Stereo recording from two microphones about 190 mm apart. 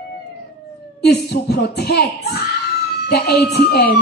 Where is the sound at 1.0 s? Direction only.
60° left (ahead or behind).